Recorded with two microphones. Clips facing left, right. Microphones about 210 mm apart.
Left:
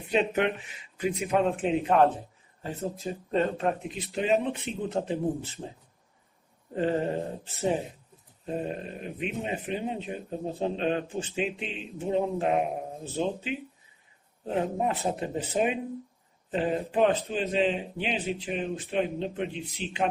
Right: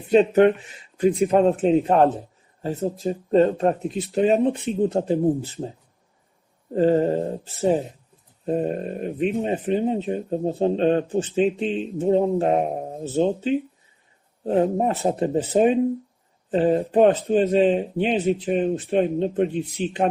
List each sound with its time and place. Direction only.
0.1 s a man's voice: 45° right (ahead or behind)
6.7 s a man's voice: 40° right (ahead or behind)
14.5 s a man's voice: 35° right (ahead or behind)